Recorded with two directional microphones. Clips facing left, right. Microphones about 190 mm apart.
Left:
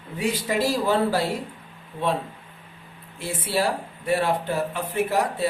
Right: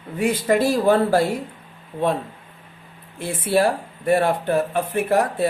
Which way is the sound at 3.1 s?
55° right (ahead or behind).